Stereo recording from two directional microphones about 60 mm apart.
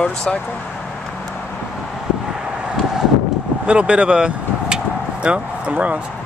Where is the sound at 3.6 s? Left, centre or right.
Centre.